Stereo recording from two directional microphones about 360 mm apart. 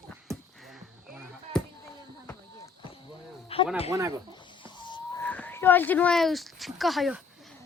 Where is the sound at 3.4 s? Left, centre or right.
Centre.